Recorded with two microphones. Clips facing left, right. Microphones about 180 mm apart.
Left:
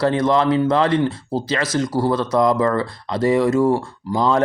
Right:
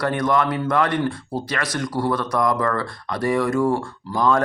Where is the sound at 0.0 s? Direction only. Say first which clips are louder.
Left 4 dB; 25° left (ahead or behind).